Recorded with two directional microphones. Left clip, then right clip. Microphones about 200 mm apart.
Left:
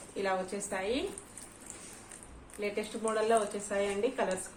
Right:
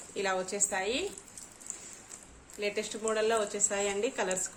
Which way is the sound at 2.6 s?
50° right (ahead or behind).